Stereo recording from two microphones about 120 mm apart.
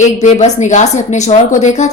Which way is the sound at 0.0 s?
75° left (ahead or behind).